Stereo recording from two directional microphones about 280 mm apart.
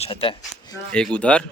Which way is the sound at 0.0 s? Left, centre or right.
Centre.